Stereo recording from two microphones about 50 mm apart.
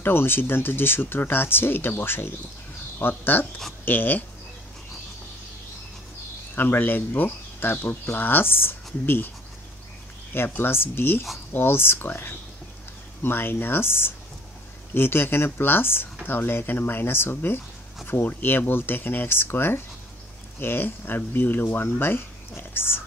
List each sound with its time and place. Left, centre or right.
0.0 s speech: left
6.5 s speech: left
10.3 s speech: left